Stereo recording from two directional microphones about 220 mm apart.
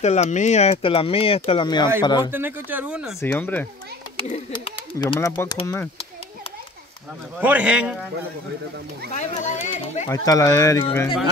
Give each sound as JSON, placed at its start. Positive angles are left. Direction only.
{"t": 0.0, "sound": "speech", "side_deg": 30}
{"t": 2.3, "sound": "speech", "side_deg": -10}
{"t": 3.2, "sound": "speech", "side_deg": 10}
{"t": 4.2, "sound": "speech", "side_deg": 25}
{"t": 7.3, "sound": "speech", "side_deg": -5}
{"t": 9.1, "sound": "speech", "side_deg": 30}
{"t": 10.0, "sound": "speech", "side_deg": 15}